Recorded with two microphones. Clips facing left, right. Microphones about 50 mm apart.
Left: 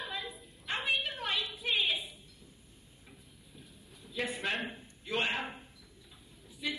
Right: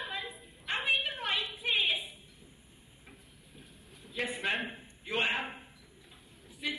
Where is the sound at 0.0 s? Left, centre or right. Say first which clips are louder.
Right 1 dB; centre.